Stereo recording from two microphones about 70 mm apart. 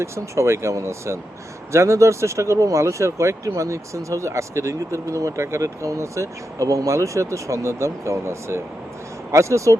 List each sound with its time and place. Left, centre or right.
0.0 s speech: right